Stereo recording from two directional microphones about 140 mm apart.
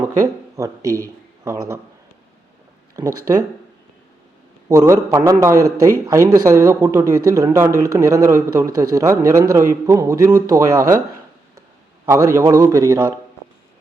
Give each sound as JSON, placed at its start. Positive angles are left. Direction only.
{"t": 0.2, "sound": "speech", "side_deg": -20}
{"t": 2.9, "sound": "a man's voice", "side_deg": -25}
{"t": 4.7, "sound": "a man's voice", "side_deg": -25}
{"t": 12.0, "sound": "a man's voice", "side_deg": -25}